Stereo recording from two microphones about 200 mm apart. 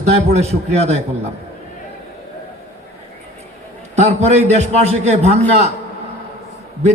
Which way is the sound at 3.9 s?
35° right (ahead or behind).